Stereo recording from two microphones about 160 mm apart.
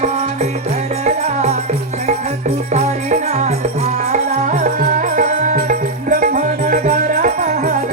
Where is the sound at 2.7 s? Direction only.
45° right (ahead or behind).